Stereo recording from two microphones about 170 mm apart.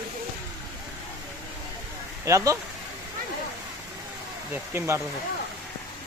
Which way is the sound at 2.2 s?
20° right (ahead or behind).